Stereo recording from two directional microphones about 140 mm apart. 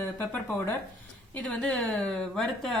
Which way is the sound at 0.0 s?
15° left (ahead or behind).